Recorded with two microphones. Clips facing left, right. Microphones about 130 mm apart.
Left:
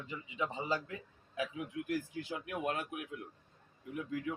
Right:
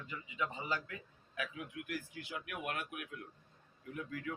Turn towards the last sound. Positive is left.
turn(degrees=20)  # may be behind; listen again after turning